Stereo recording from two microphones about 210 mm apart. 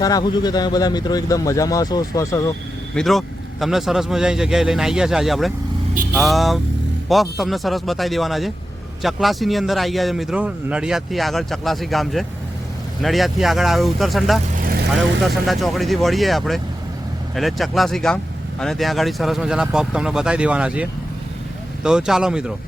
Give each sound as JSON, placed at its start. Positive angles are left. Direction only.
{"t": 0.0, "sound": "speech", "side_deg": 20}
{"t": 2.9, "sound": "speech", "side_deg": 0}
{"t": 14.6, "sound": "vehicle", "side_deg": -45}
{"t": 15.4, "sound": "speech", "side_deg": 0}
{"t": 21.8, "sound": "speech", "side_deg": -5}